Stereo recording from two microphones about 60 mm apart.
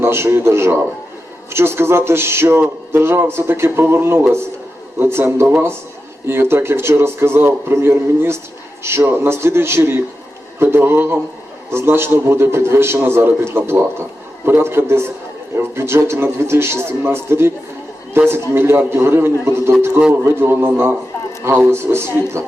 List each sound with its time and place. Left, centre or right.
0.0 s a man's voice: right